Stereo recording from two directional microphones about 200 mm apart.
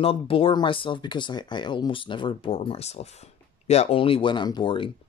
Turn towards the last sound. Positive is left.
turn(degrees=25)  # may be behind; listen again after turning